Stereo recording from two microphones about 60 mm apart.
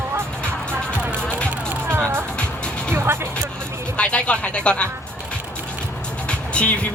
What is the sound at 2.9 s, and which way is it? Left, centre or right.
Music, right.